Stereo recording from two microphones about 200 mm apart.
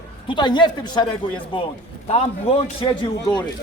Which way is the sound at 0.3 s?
20° left (ahead or behind).